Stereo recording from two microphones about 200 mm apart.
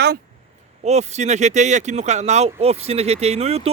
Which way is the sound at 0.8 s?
35° right (ahead or behind).